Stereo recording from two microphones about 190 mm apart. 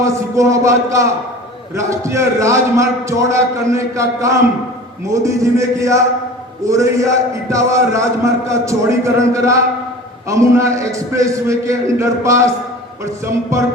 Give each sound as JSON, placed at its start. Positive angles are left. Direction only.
{"t": 0.0, "sound": "a man's voice", "side_deg": -15}
{"t": 13.5, "sound": "a man's voice", "side_deg": -15}